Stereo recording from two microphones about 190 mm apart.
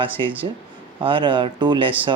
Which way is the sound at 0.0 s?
25° right (ahead or behind).